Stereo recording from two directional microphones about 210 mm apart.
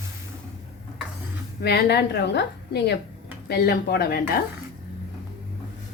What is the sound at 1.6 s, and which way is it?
Speech, 50° left (ahead or behind).